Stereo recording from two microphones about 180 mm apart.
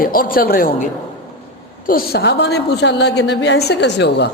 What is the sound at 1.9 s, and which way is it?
A woman's voice, 60° left (ahead or behind).